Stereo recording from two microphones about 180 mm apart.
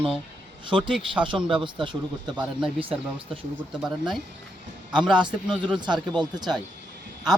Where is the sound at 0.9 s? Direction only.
5° right (ahead or behind).